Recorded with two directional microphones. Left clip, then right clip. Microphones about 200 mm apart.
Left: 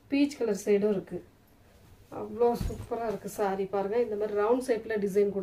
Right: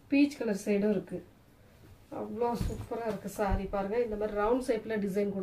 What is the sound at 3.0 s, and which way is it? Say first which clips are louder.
A woman's voice: left 2 dB; 55° left (ahead or behind).